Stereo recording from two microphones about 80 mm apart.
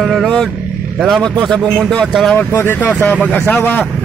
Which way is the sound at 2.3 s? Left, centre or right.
Left.